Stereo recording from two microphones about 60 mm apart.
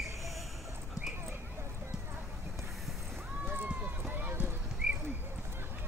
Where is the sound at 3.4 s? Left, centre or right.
Right.